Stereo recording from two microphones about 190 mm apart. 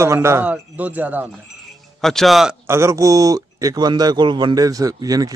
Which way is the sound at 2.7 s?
15° right (ahead or behind).